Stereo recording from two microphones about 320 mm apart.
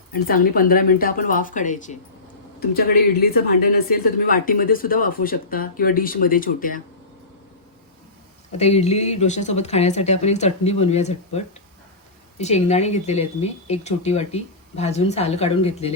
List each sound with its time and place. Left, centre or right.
0.1 s speech: left
8.5 s speech: centre